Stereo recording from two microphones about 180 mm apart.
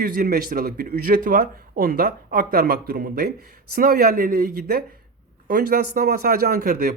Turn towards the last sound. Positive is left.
turn(degrees=-55)  # may be behind; listen again after turning